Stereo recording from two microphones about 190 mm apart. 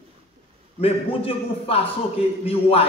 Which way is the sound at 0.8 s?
30° left (ahead or behind).